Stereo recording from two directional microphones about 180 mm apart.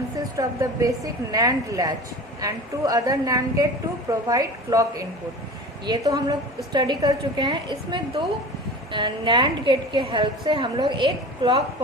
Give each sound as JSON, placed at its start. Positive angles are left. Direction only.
{"t": 0.3, "sound": "a woman's voice", "side_deg": -20}